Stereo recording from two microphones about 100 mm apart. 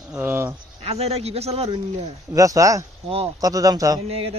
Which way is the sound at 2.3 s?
35° right (ahead or behind).